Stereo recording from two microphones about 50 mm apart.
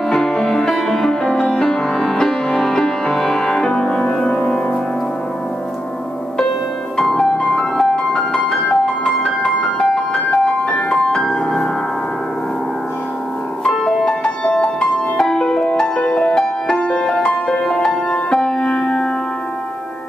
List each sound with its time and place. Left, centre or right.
0.1 s music: centre
1.3 s music: centre
7.0 s music: centre
13.7 s music: centre